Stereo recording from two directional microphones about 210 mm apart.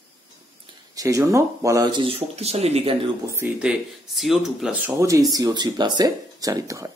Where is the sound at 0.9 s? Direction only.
15° right (ahead or behind).